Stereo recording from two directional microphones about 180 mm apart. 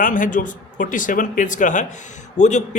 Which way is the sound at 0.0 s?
45° left (ahead or behind).